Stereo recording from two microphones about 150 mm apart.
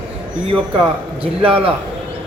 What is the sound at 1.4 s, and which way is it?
Speech, 35° right (ahead or behind).